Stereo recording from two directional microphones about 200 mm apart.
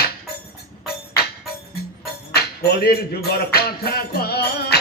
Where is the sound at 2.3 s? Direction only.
50° left (ahead or behind).